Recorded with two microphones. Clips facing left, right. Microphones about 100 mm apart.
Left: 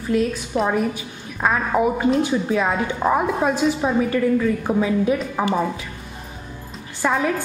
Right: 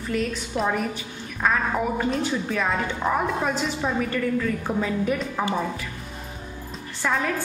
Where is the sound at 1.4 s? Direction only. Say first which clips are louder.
Left 4 dB; 15° left (ahead or behind).